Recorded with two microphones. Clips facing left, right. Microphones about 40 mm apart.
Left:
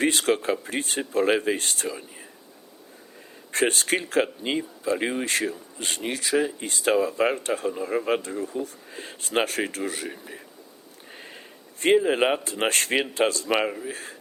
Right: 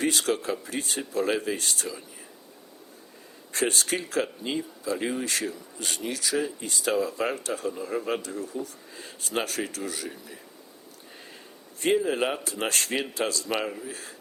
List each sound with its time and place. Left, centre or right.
0.0 s speech: left
3.5 s speech: left